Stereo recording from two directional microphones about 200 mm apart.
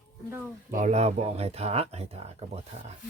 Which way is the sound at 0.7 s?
35° right (ahead or behind).